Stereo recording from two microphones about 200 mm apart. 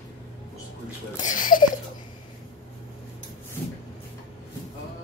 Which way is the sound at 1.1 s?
40° left (ahead or behind).